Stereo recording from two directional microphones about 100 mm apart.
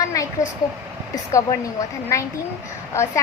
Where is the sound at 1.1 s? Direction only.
35° left (ahead or behind).